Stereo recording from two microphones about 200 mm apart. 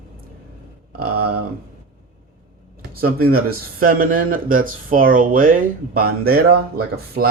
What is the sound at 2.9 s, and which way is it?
Speech, 50° right (ahead or behind).